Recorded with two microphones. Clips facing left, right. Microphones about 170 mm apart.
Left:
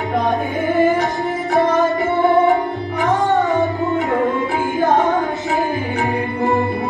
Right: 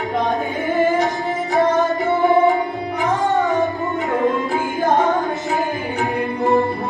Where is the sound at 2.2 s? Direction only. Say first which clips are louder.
Left 1 dB; 20° right (ahead or behind).